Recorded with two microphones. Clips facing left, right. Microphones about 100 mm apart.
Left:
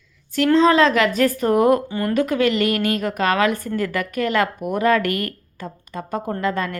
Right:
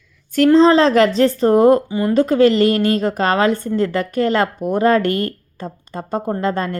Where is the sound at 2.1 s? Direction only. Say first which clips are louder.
Right 6 dB; 30° right (ahead or behind).